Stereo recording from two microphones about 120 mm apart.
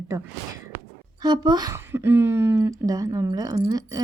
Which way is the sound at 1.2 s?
35° right (ahead or behind).